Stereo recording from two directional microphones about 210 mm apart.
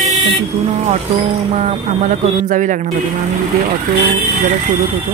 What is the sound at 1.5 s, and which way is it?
Speech, 30° right (ahead or behind).